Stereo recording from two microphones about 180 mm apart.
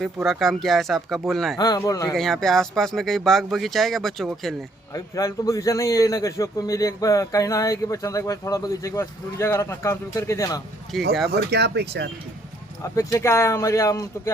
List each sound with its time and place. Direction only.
0.3 s speech: centre (ahead or behind)
1.5 s a man's voice: 20° left (ahead or behind)
2.1 s speech: centre (ahead or behind)
4.9 s a man's voice: 20° left (ahead or behind)
10.9 s speech: centre (ahead or behind)
11.3 s speech: 70° right (ahead or behind)
12.8 s a man's voice: 20° left (ahead or behind)